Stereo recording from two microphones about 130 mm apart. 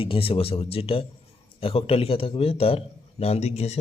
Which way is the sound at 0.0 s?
45° left (ahead or behind).